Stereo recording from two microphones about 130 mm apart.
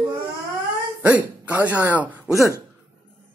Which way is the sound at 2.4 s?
25° left (ahead or behind).